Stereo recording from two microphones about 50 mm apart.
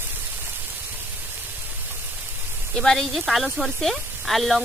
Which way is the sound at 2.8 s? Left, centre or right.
Centre.